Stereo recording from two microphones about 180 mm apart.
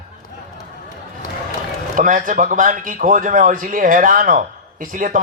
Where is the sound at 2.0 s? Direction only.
50° right (ahead or behind).